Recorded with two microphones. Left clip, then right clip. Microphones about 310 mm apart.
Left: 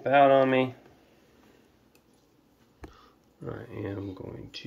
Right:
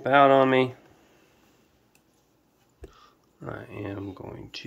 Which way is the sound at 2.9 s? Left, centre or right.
Centre.